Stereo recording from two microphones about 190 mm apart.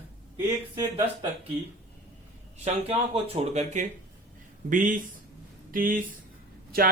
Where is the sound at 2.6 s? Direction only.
30° right (ahead or behind).